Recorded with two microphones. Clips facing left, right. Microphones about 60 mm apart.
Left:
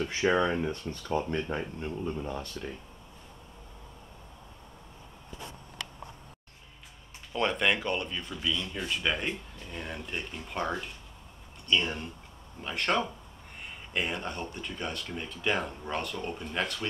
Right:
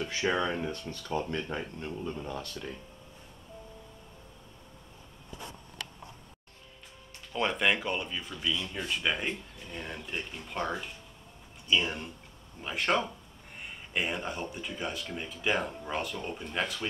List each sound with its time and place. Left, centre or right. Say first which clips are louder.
0.2 s speech: left 4 dB; centre
0.7 s speech: left 2 dB; left
1.0 s speech: left 3 dB; centre
7.3 s speech: left 1 dB; centre